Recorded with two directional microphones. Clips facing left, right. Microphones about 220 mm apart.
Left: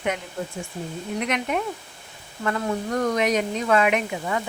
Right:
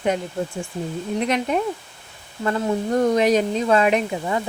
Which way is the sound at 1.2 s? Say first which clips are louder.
Right 4 dB; 30° right (ahead or behind).